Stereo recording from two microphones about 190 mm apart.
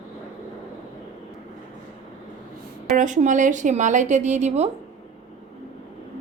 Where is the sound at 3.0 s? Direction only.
40° right (ahead or behind).